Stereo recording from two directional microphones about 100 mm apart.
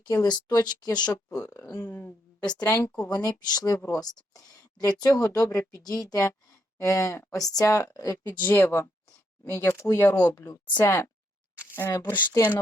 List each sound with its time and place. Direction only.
0.2 s speech: 45° left (ahead or behind)
1.3 s speech: 25° left (ahead or behind)
2.4 s speech: 45° left (ahead or behind)
8.3 s speech: 20° left (ahead or behind)